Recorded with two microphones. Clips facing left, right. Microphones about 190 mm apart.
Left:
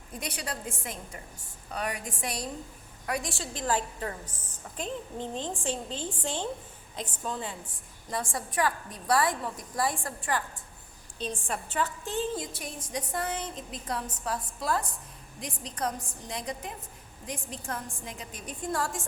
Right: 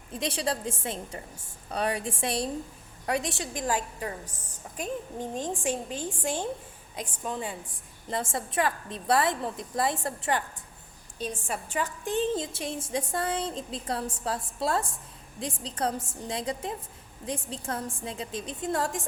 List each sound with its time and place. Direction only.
0.1 s a woman's voice: 25° right (ahead or behind)
11.2 s a woman's voice: 10° right (ahead or behind)